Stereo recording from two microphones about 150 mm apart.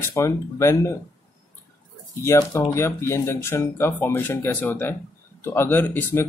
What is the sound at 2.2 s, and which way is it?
Speech, 20° left (ahead or behind).